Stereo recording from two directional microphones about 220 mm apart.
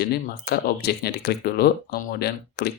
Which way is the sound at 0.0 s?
45° left (ahead or behind).